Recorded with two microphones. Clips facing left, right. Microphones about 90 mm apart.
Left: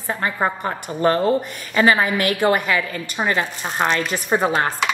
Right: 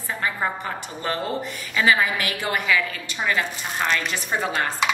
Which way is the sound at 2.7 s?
35° left (ahead or behind).